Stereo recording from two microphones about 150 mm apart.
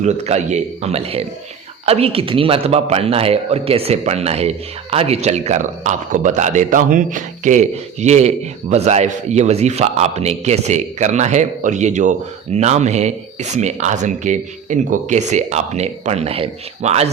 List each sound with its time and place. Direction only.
0.0 s a man's voice: 50° right (ahead or behind)